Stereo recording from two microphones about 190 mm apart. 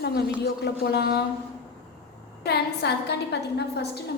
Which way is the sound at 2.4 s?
60° left (ahead or behind).